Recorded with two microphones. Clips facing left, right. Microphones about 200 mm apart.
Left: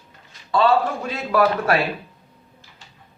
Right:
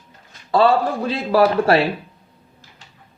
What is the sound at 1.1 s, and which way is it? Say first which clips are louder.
Speech: right 4 dB; 30° right (ahead or behind).